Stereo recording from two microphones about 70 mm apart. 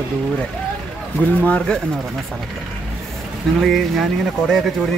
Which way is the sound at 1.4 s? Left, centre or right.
Centre.